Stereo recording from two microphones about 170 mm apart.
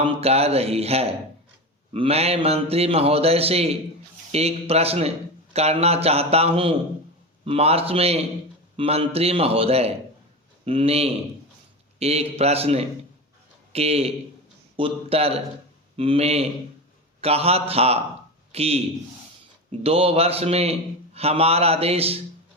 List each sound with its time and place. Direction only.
0.0 s a man's voice: 35° right (ahead or behind)
19.8 s a man's voice: 35° right (ahead or behind)